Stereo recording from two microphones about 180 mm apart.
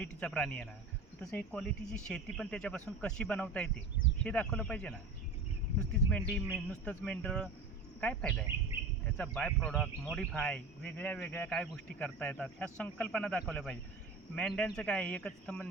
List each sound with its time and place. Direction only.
0.0 s speech: 5° left (ahead or behind)
6.1 s speech: 5° left (ahead or behind)